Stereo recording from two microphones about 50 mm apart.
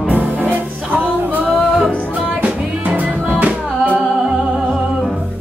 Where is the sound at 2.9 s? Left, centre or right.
Right.